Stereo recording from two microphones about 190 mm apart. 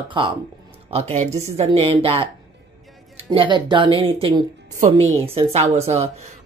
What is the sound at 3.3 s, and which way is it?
Speech, 25° right (ahead or behind).